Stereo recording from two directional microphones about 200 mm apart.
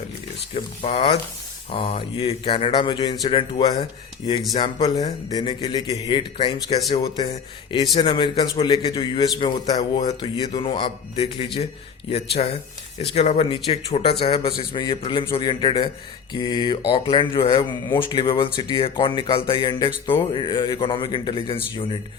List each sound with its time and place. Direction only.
0.5 s a man's voice: 30° left (ahead or behind)